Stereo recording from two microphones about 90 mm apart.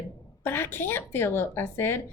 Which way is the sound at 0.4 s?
25° left (ahead or behind).